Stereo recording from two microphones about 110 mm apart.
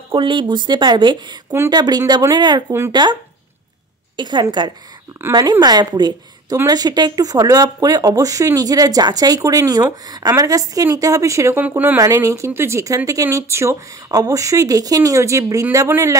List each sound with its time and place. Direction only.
0.1 s a woman's voice: 50° right (ahead or behind)
4.2 s a woman's voice: 40° right (ahead or behind); by 11.6 s 25° right (ahead or behind)
11.6 s speech: 15° right (ahead or behind)
12.0 s speech: 30° right (ahead or behind)